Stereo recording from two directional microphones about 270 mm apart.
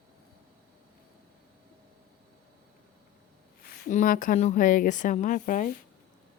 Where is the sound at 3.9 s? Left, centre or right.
Left.